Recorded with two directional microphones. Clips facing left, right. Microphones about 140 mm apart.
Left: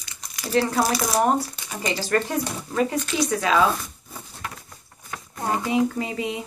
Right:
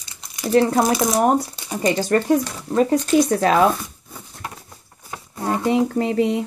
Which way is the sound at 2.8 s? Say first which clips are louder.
Right 7 dB; 40° right (ahead or behind).